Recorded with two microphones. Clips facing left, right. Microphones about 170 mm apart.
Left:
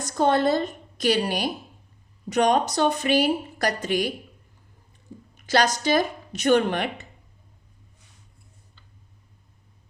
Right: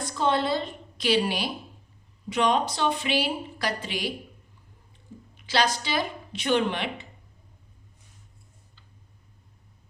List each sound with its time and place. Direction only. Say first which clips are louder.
0.0 s a woman's voice: left 5 dB; 45° left (ahead or behind)
5.4 s speech: left 4 dB; 45° left (ahead or behind)